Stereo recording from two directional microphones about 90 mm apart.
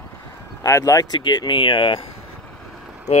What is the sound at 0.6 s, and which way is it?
Speech, 35° left (ahead or behind).